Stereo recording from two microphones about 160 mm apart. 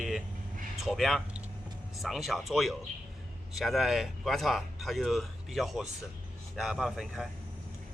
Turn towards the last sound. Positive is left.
turn(degrees=-5)  # may be behind; listen again after turning